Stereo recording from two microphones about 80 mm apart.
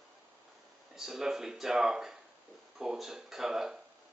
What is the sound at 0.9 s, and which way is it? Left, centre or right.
Speech, centre.